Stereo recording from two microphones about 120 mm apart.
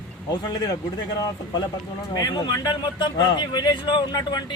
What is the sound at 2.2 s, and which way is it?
Speech, 35° left (ahead or behind).